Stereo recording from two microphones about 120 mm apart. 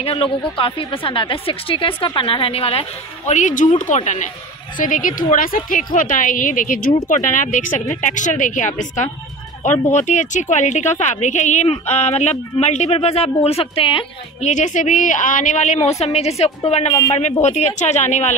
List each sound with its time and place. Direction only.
0.0 s a woman's voice: 50° left (ahead or behind)
3.3 s speech: 90° left
9.6 s speech: 75° left (ahead or behind); by 14.0 s 45° left (ahead or behind)
14.4 s a woman's voice: 85° left